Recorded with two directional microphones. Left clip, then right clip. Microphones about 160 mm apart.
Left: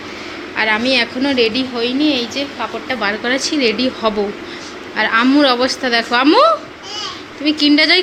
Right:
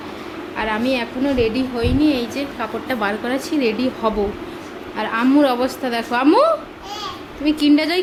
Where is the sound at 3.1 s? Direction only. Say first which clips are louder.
Left 5 dB; 5° right (ahead or behind).